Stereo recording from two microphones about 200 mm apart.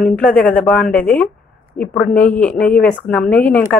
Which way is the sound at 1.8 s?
45° left (ahead or behind).